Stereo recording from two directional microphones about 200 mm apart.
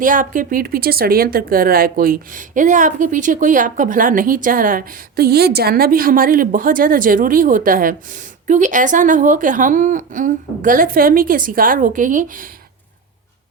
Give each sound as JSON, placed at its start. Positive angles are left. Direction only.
{"t": 0.0, "sound": "a woman's voice", "side_deg": -40}